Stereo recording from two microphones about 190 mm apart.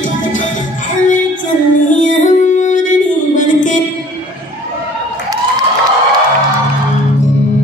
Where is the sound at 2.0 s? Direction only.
40° left (ahead or behind).